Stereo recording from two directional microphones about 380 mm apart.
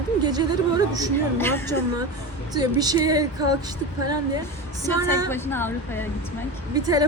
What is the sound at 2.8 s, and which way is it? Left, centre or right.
Speech, centre.